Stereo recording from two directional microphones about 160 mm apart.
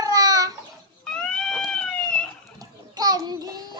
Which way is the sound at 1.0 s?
5° left (ahead or behind).